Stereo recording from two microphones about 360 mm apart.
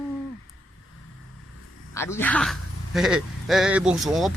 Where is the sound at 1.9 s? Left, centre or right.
Centre.